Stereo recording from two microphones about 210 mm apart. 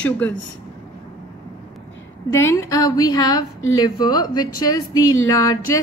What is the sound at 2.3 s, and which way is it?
A woman's voice, 15° left (ahead or behind).